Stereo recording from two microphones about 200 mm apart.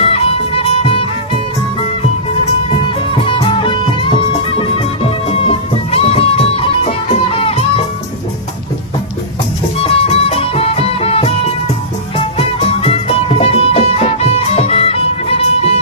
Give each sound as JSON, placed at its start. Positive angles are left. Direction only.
{"t": 0.1, "sound": "music", "side_deg": 30}
{"t": 2.7, "sound": "music", "side_deg": 25}
{"t": 9.8, "sound": "music", "side_deg": 30}